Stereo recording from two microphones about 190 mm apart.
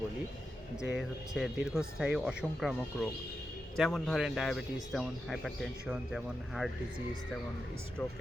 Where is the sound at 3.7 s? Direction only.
Centre (ahead or behind).